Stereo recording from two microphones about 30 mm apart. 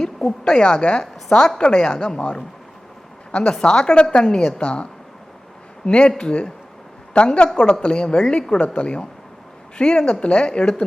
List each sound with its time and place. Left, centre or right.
0.4 s a woman's voice: left
3.5 s a woman's voice: left
8.5 s a woman's voice: left
9.7 s a woman's voice: left